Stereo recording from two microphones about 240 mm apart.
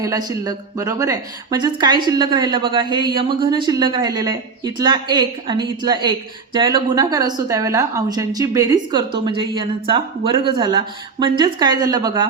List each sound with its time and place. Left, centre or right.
0.0 s a woman's voice: centre